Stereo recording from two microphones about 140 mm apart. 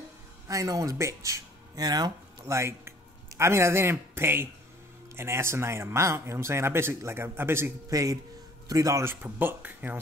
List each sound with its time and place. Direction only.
0.5 s speech: 25° right (ahead or behind)